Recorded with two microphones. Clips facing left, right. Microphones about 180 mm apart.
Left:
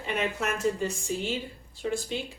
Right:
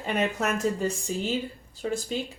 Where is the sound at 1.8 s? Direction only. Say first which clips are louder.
Right 1 dB; 40° right (ahead or behind).